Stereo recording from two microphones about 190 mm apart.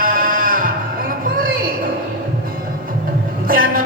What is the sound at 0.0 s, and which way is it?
Music, 50° right (ahead or behind).